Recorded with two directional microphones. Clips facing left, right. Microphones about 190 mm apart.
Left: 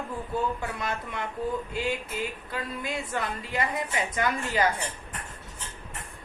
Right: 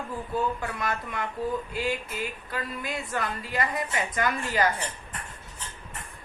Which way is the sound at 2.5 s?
20° left (ahead or behind).